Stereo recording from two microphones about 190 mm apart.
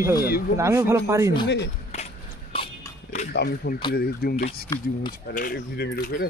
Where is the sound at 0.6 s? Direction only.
15° right (ahead or behind).